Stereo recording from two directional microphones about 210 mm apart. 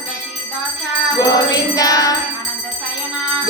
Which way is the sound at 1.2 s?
20° left (ahead or behind).